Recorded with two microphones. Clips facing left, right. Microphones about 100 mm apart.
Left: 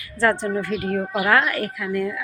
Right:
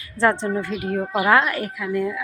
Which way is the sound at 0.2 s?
20° right (ahead or behind).